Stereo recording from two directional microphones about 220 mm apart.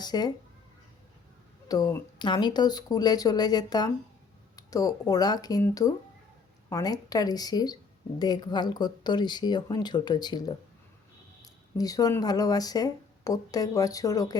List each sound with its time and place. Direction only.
0.0 s speech: 20° left (ahead or behind)
1.6 s speech: 15° left (ahead or behind)